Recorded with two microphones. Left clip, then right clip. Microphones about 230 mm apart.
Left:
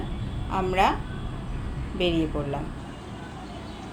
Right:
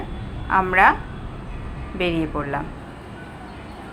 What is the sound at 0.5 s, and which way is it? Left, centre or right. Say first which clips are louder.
Speech: right 7 dB; right.